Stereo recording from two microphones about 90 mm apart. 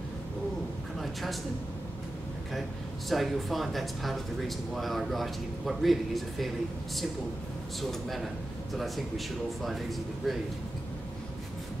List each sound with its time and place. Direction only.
0.9 s a sound: centre (ahead or behind)
3.1 s speech: centre (ahead or behind)
7.8 s speech: centre (ahead or behind)